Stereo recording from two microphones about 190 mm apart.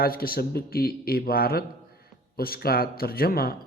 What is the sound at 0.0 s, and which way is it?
Speech, 50° left (ahead or behind).